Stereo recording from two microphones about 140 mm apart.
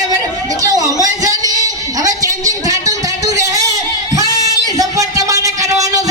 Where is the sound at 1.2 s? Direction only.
25° right (ahead or behind).